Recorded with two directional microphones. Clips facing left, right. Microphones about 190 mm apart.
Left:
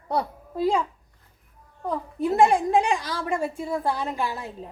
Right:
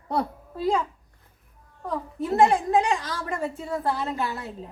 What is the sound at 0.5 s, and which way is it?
Speech, 10° left (ahead or behind).